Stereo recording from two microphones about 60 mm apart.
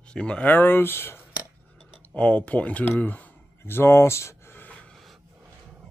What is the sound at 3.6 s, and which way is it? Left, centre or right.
Speech, left.